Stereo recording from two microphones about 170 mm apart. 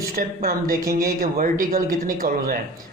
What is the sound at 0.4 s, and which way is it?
Speech, 60° right (ahead or behind).